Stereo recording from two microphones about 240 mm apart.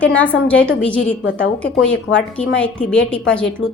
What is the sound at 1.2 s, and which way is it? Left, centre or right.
Speech, left.